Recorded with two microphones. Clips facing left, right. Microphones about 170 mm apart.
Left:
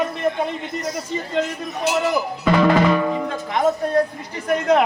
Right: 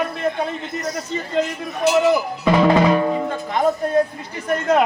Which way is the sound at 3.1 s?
10° right (ahead or behind).